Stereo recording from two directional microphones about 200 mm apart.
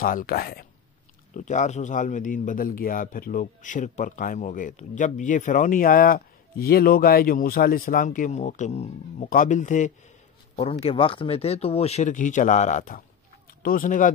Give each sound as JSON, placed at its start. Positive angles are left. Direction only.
{"t": 0.0, "sound": "speech", "side_deg": 45}
{"t": 1.3, "sound": "speech", "side_deg": 40}